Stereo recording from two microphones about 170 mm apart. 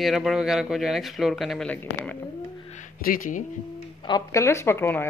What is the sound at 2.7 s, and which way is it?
Speech, 50° left (ahead or behind).